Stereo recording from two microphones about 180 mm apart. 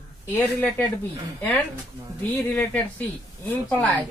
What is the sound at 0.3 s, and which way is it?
Speech, 10° left (ahead or behind).